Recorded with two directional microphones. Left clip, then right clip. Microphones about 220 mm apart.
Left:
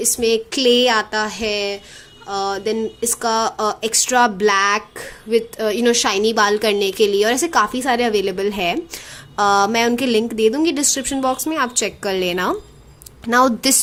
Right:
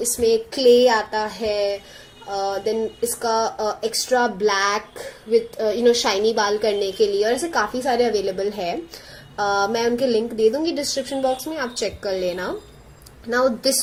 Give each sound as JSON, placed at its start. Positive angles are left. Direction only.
{"t": 0.0, "sound": "a woman's voice", "side_deg": 35}